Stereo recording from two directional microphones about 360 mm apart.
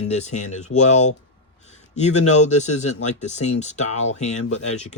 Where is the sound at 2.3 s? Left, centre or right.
Centre.